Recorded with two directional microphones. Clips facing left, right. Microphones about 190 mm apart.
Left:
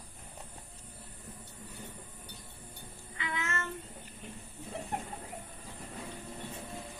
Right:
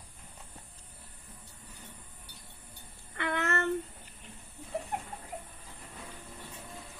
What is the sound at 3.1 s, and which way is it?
Child singing, 65° right (ahead or behind).